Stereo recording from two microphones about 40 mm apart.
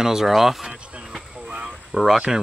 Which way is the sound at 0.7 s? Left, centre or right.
Right.